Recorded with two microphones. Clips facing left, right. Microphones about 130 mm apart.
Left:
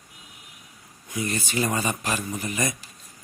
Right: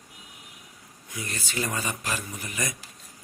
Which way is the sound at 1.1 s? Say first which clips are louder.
Left 6 dB; 20° left (ahead or behind).